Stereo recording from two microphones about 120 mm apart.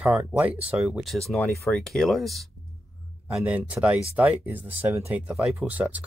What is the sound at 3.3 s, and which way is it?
Speech, 10° right (ahead or behind).